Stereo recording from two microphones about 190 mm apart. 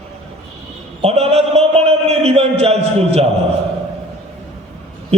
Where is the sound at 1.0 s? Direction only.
35° right (ahead or behind).